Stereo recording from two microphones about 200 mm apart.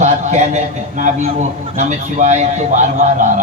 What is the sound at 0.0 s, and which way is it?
A man's voice, 35° right (ahead or behind).